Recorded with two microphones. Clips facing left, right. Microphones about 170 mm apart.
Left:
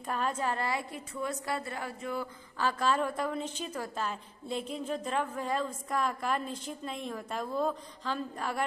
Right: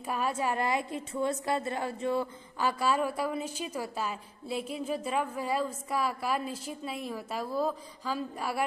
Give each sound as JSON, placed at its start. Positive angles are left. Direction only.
{"t": 0.0, "sound": "a woman's voice", "side_deg": -10}
{"t": 2.6, "sound": "a woman's voice", "side_deg": -10}